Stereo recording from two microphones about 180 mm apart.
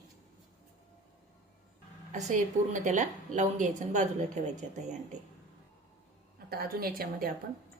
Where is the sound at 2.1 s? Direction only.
40° right (ahead or behind).